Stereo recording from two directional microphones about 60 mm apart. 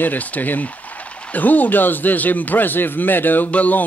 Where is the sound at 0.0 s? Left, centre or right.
Left.